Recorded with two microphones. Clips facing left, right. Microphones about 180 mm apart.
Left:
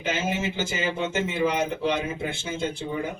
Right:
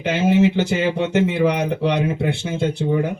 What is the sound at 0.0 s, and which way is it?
Speech, 60° right (ahead or behind).